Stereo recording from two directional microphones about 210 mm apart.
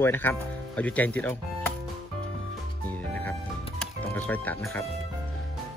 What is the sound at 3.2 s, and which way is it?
Music, 5° left (ahead or behind).